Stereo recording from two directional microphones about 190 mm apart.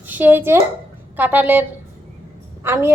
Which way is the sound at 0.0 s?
10° right (ahead or behind).